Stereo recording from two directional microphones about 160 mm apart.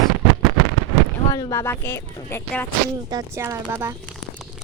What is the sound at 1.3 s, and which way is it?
Speech, 20° left (ahead or behind).